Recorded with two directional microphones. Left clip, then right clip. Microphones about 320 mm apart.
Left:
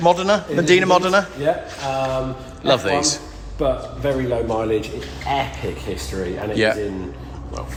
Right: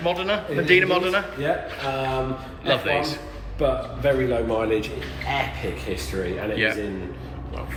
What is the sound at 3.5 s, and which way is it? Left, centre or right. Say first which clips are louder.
A man's voice: left 2 dB; left.